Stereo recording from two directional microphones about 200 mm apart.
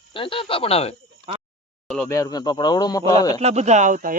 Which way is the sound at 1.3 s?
30° right (ahead or behind).